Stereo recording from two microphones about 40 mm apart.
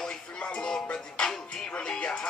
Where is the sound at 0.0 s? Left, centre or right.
Left.